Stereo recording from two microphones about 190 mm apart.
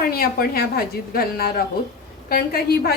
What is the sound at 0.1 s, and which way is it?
A woman's voice, 50° left (ahead or behind).